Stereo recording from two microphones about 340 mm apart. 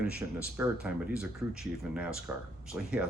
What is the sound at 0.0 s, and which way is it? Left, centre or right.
Speech, centre.